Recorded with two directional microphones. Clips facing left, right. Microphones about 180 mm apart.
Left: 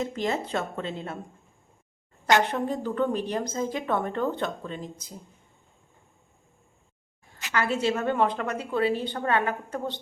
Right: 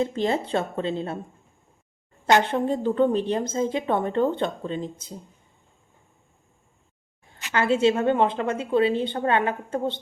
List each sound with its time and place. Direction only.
0.0 s a woman's voice: 30° right (ahead or behind)
2.2 s a woman's voice: 25° right (ahead or behind)
7.5 s a woman's voice: 25° right (ahead or behind)